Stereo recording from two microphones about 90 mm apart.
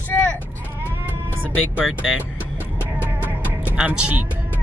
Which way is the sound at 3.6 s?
10° right (ahead or behind).